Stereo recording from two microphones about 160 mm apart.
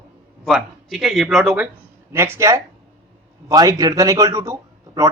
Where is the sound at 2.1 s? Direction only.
15° right (ahead or behind).